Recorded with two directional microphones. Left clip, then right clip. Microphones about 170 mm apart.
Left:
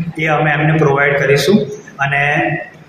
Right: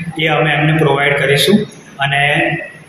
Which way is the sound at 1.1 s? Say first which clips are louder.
Even; 20° right (ahead or behind).